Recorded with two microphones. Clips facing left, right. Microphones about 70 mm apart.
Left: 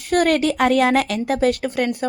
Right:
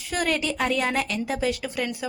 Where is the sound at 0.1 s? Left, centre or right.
Left.